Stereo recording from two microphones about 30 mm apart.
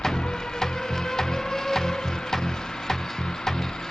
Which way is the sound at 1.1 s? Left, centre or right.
Centre.